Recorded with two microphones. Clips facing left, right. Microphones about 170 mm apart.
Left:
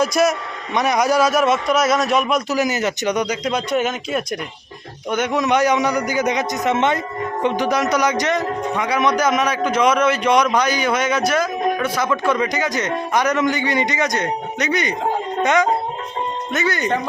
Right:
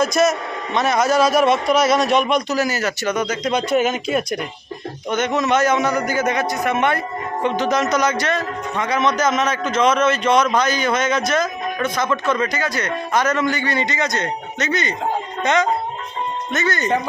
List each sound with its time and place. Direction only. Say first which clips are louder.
0.0 s speech: even; 10° left (ahead or behind)
1.2 s speech: right 1 dB; 30° right (ahead or behind)
2.0 s speech: right 1 dB; 5° left (ahead or behind)
2.6 s speech: left 1 dB; 20° left (ahead or behind)
3.5 s speech: right 5 dB; centre (ahead or behind)
5.1 s speech: even; 10° left (ahead or behind)
16.5 s speech: even; 10° left (ahead or behind)